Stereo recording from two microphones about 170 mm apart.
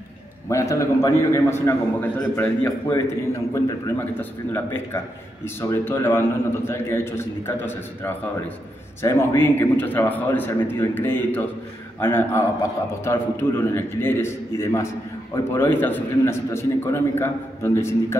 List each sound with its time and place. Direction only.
0.5 s a man's voice: 15° left (ahead or behind)